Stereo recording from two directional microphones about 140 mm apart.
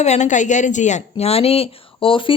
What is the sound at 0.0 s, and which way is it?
Speech, 55° left (ahead or behind).